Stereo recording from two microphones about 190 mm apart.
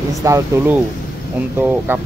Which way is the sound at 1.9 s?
10° right (ahead or behind).